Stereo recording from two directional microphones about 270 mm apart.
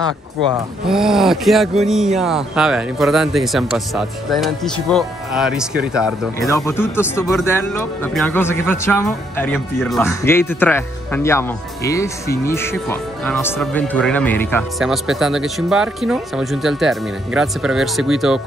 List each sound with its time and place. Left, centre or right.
0.4 s speech: centre
0.8 s speech: centre
6.5 s speech: centre